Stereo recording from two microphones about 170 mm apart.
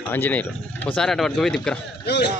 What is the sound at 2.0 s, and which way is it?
Speech, 80° left.